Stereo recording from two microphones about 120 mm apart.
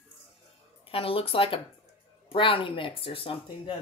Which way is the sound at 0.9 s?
50° left (ahead or behind).